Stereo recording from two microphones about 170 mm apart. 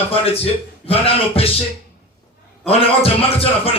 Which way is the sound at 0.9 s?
35° left (ahead or behind).